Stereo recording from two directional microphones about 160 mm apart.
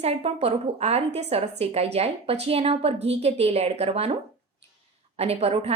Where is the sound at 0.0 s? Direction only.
40° right (ahead or behind).